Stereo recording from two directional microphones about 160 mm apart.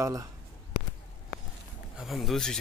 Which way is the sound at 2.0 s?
Centre (ahead or behind).